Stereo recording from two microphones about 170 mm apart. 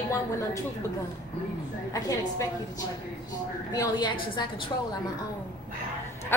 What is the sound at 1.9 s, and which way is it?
Speech, 20° left (ahead or behind).